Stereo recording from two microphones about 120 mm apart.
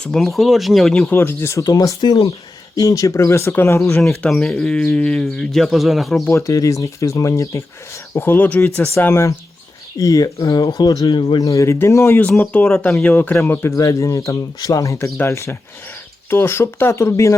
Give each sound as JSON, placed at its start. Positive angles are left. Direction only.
{"t": 0.0, "sound": "speech", "side_deg": 5}
{"t": 1.1, "sound": "speech", "side_deg": 20}
{"t": 4.2, "sound": "speech", "side_deg": 5}
{"t": 6.3, "sound": "speech", "side_deg": 25}
{"t": 11.4, "sound": "speech", "side_deg": 25}
{"t": 12.4, "sound": "speech", "side_deg": 10}